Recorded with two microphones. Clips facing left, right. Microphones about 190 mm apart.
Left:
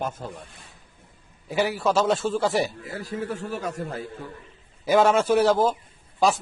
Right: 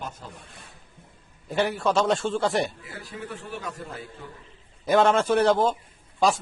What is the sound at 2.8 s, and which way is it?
A man's voice, 40° left (ahead or behind).